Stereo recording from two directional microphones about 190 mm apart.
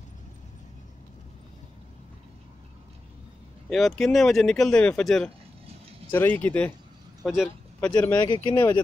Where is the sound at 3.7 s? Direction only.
Centre (ahead or behind).